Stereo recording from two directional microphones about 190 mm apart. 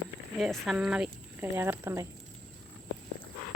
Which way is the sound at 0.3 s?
Centre (ahead or behind).